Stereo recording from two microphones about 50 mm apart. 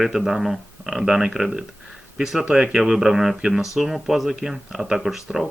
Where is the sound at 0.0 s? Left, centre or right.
Centre.